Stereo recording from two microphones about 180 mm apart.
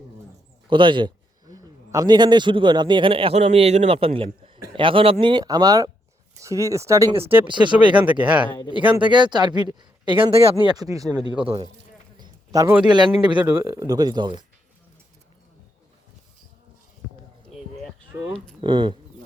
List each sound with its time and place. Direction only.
0.7 s speech: 25° right (ahead or behind); by 7.4 s 10° right (ahead or behind)
7.4 s speech: 25° right (ahead or behind)
8.2 s speech: 5° right (ahead or behind)
8.4 s speech: 25° left (ahead or behind)
8.9 s speech: 25° right (ahead or behind)
12.5 s speech: 10° right (ahead or behind)
12.9 s speech: 25° right (ahead or behind)
13.4 s speech: 10° right (ahead or behind)
18.2 s speech: 25° right (ahead or behind)